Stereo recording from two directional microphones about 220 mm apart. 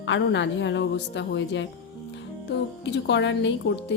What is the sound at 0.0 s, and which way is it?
A woman's voice, 55° left (ahead or behind).